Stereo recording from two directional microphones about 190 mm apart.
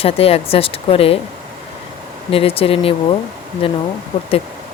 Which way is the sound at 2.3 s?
30° left (ahead or behind).